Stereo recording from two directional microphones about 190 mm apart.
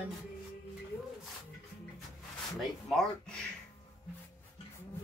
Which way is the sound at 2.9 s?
Centre (ahead or behind).